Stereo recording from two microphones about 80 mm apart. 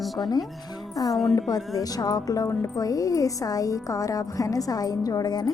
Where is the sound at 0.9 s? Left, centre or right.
Left.